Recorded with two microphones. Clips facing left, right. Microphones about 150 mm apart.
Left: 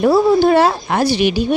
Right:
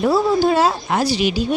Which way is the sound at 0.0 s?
60° left (ahead or behind).